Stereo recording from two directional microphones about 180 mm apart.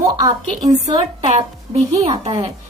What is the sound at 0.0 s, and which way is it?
A woman's voice, 20° right (ahead or behind).